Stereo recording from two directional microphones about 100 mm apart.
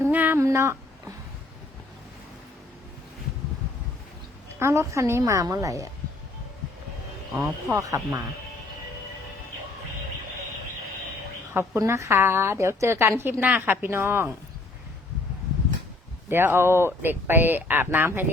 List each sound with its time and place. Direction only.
0.0 s a sound: 20° right (ahead or behind)
0.4 s speech: 30° right (ahead or behind)
4.6 s a woman's voice: 30° right (ahead or behind)
7.4 s a woman's voice: 30° right (ahead or behind)
11.8 s speech: 30° right (ahead or behind)
16.3 s speech: 25° right (ahead or behind)